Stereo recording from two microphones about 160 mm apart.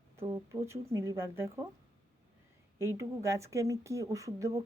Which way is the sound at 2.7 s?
15° right (ahead or behind).